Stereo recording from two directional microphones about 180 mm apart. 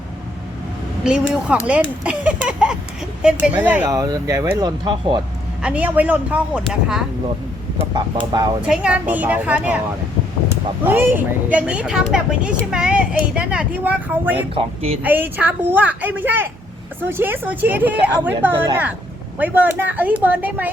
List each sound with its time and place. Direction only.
1.2 s a woman's voice: 5° right (ahead or behind); by 5.2 s 25° right (ahead or behind)
5.6 s a woman's voice: 10° right (ahead or behind)
7.9 s speech: 25° right (ahead or behind)
8.6 s a woman's voice: 5° right (ahead or behind)
10.8 s a woman's voice: 10° right (ahead or behind)
14.5 s speech: 35° right (ahead or behind)
15.0 s a woman's voice: 10° right (ahead or behind)